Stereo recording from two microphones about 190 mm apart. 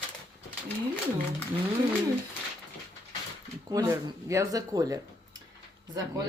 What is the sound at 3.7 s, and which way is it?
Speech, 15° right (ahead or behind).